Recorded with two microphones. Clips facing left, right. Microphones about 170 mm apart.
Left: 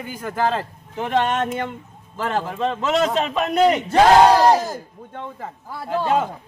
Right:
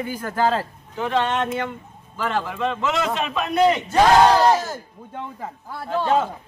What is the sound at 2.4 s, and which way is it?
Speech, 35° left (ahead or behind).